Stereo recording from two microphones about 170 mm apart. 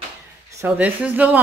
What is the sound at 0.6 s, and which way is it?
Speech, 10° right (ahead or behind).